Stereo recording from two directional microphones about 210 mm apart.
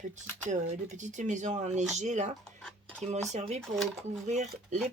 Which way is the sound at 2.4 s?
5° left (ahead or behind).